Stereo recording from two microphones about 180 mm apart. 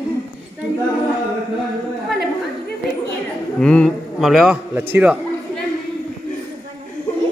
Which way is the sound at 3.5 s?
5° left (ahead or behind).